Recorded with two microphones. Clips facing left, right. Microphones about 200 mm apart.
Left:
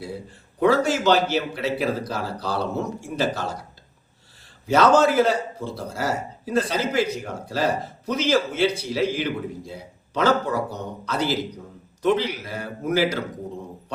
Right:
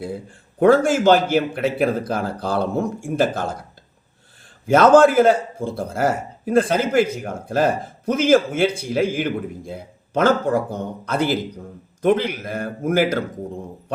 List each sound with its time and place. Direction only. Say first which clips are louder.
0.6 s a man's voice: right 5 dB; 50° right (ahead or behind)